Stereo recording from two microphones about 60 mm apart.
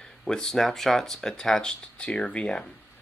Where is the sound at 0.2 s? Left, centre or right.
Centre.